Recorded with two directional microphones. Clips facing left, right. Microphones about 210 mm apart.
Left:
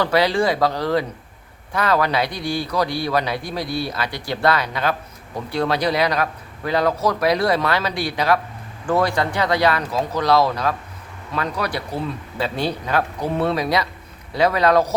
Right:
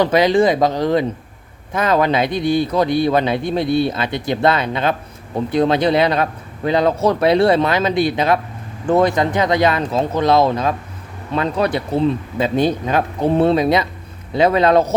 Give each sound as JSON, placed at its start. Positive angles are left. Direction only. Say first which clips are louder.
{"t": 0.0, "sound": "a man's voice", "louder": "right 5 dB", "side_deg": -20}